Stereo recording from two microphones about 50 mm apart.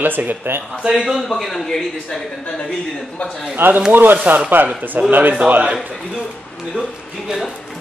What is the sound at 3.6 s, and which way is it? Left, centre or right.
Speech, right.